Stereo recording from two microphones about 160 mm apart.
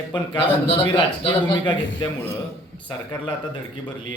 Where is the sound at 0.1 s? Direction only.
30° left (ahead or behind).